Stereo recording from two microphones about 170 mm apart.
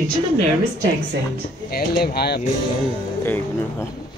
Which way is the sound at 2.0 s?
70° left (ahead or behind).